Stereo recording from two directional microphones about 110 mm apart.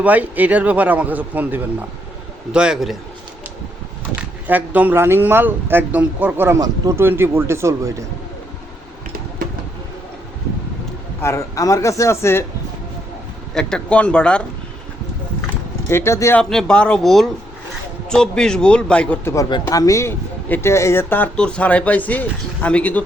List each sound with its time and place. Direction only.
0.0 s speech: 15° right (ahead or behind)
4.1 s a man's voice: 15° right (ahead or behind)
11.2 s speech: 25° left (ahead or behind)
13.5 s speech: 5° left (ahead or behind)
15.9 s speech: 25° left (ahead or behind)
16.4 s speech: 5° left (ahead or behind)
19.2 s speech: 25° left (ahead or behind)
21.3 s speech: 10° left (ahead or behind)